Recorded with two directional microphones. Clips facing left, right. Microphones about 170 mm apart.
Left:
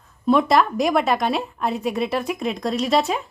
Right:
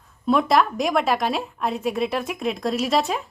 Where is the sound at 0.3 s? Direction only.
Centre (ahead or behind).